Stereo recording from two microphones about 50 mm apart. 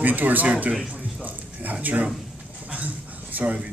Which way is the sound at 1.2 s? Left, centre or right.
Right.